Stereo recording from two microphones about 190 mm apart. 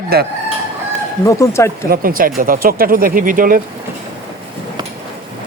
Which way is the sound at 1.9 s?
50° right (ahead or behind).